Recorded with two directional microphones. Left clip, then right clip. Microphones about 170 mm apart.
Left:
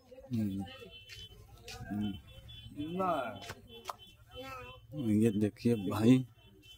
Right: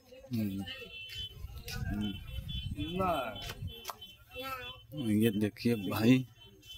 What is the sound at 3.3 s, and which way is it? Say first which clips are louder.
Chopping: right 3 dB; 5° left (ahead or behind).